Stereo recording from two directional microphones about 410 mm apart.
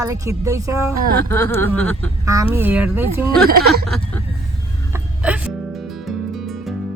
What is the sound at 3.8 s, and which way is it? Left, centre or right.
Speech, centre.